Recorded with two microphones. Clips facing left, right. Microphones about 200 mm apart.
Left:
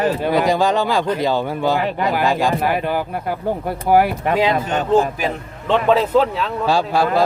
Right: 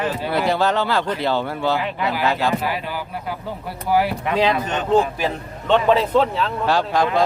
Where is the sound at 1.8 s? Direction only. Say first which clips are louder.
Left 4 dB; 45° left (ahead or behind).